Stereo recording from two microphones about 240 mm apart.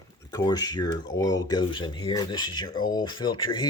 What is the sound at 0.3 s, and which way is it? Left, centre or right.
Speech, centre.